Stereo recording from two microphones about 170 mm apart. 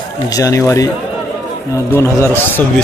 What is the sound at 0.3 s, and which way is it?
Speech, 20° left (ahead or behind).